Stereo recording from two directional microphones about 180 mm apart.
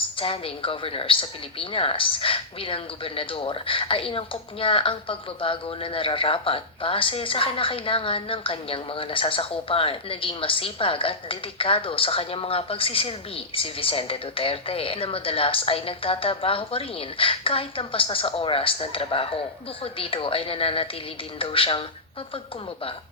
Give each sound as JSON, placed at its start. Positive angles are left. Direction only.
{"t": 0.2, "sound": "a woman's voice", "side_deg": 30}